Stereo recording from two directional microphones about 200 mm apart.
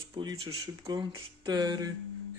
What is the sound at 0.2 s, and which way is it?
Speech, 25° right (ahead or behind).